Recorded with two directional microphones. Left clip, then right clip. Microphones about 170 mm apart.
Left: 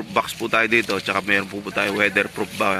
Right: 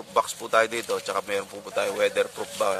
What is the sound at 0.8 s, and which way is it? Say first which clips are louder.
Speech: left 4 dB; 25° left (ahead or behind).